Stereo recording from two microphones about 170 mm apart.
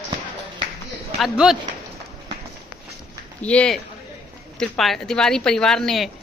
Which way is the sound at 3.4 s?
5° left (ahead or behind).